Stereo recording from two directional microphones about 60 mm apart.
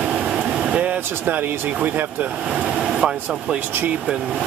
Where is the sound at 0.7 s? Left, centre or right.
Right.